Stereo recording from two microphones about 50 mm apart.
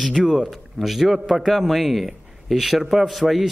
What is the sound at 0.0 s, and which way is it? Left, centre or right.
A man's voice, centre.